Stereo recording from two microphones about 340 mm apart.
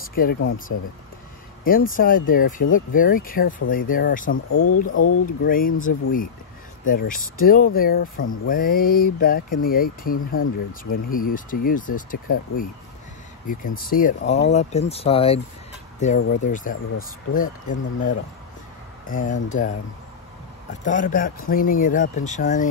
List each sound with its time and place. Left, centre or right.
0.1 s speech: left
4.3 s speech: left
5.2 s speech: left
13.7 s speech: left
20.8 s speech: left